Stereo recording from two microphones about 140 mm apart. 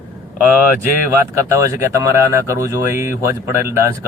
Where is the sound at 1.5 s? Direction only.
20° right (ahead or behind).